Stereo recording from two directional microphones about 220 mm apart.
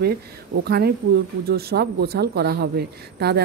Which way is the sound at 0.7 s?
45° right (ahead or behind).